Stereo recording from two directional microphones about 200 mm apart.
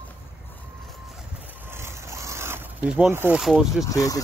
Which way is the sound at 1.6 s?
10° right (ahead or behind).